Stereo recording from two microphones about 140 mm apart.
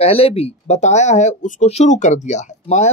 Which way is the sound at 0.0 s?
45° left (ahead or behind).